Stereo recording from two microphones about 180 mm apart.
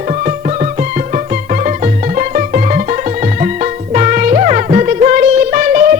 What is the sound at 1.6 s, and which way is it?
Music, 45° right (ahead or behind).